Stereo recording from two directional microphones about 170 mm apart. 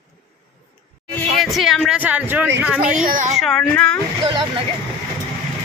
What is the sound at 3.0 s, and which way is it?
Speech, 50° right (ahead or behind).